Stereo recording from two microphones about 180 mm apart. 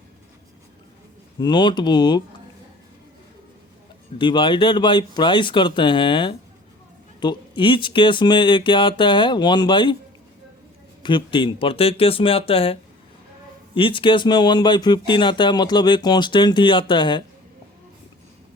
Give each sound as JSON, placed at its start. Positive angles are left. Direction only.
{"t": 1.4, "sound": "speech", "side_deg": 25}
{"t": 4.2, "sound": "speech", "side_deg": 25}
{"t": 11.0, "sound": "speech", "side_deg": 25}
{"t": 13.7, "sound": "speech", "side_deg": 30}